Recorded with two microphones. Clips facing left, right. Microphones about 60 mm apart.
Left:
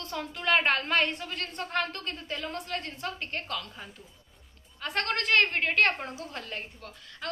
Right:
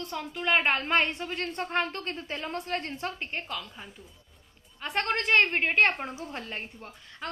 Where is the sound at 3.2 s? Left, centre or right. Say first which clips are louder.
Even; centre.